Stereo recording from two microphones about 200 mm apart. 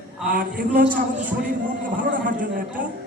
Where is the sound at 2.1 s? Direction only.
40° right (ahead or behind).